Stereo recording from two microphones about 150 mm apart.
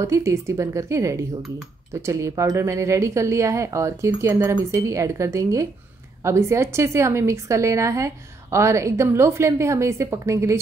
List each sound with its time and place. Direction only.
0.0 s a woman's voice: 20° right (ahead or behind)